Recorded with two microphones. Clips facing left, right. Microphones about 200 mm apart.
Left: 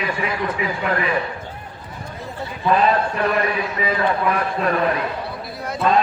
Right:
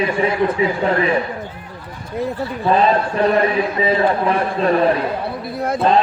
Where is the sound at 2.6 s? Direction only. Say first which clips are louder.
Right 2 dB; 30° right (ahead or behind).